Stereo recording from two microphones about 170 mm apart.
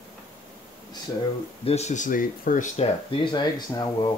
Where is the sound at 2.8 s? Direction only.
30° left (ahead or behind).